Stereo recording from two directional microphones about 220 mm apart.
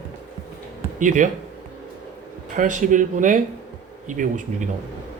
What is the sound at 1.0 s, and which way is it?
Speech, 35° right (ahead or behind).